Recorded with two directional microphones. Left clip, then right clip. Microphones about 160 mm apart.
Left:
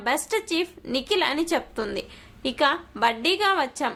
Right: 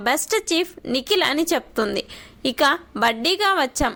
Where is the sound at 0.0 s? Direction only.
30° right (ahead or behind).